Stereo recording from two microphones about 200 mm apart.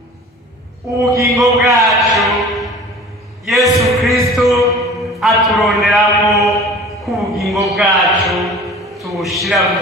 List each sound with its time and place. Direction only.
1.0 s a man's voice: 15° right (ahead or behind)
1.3 s a man's voice: centre (ahead or behind)
1.9 s music: centre (ahead or behind)
3.4 s a sound: centre (ahead or behind)
7.0 s music: centre (ahead or behind)
9.0 s a sound: centre (ahead or behind)